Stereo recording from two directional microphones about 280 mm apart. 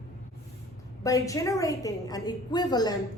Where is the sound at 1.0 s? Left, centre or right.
Centre.